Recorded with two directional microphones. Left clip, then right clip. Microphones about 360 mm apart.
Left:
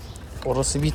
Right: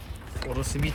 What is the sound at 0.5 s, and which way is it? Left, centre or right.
Speech, centre.